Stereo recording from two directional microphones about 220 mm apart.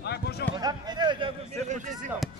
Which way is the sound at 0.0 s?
50° left (ahead or behind).